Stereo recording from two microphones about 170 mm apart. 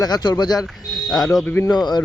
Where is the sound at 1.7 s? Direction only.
25° left (ahead or behind).